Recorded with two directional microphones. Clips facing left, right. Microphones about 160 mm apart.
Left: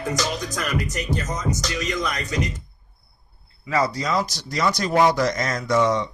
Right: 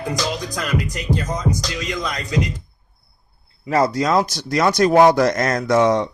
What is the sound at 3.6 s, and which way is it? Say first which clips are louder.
Speech: right 5 dB; 50° right (ahead or behind).